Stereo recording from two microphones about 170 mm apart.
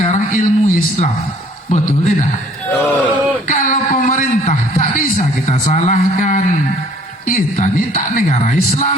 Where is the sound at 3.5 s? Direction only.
50° left (ahead or behind).